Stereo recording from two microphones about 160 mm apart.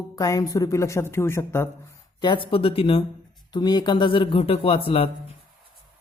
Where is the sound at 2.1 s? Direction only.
30° left (ahead or behind).